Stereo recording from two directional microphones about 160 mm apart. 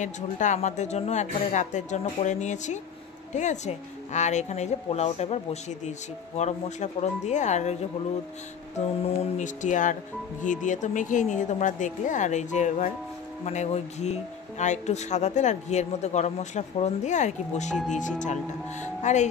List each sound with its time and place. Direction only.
0.0 s a woman's voice: 50° left (ahead or behind)
8.7 s a woman's voice: 50° left (ahead or behind)